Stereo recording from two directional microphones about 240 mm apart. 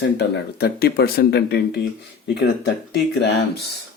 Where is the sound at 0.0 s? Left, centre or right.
Left.